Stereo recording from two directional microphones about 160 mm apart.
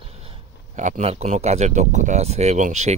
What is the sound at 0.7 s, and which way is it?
Speech, 50° right (ahead or behind).